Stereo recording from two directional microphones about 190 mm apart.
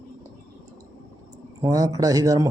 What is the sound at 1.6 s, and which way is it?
Speech, 20° right (ahead or behind).